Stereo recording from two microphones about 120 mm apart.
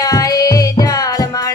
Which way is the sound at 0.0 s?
30° left (ahead or behind).